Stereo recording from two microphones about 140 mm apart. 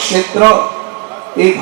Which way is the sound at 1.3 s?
15° right (ahead or behind).